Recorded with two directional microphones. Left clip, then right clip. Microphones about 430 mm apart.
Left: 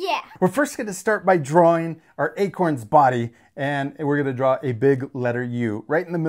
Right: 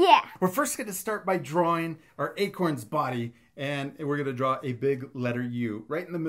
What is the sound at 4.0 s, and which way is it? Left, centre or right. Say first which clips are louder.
Speech: left 7 dB; left.